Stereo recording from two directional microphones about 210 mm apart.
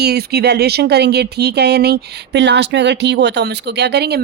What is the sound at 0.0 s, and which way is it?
Speech, 50° right (ahead or behind).